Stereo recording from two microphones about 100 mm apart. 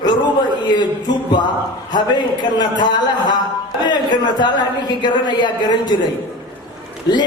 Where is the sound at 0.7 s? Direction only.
50° left (ahead or behind).